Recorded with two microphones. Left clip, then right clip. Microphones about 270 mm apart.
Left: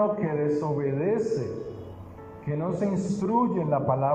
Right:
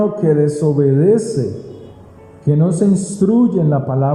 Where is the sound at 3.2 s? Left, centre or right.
Right.